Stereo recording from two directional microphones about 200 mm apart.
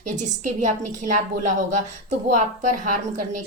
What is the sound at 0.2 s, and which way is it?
A woman's voice, 35° right (ahead or behind).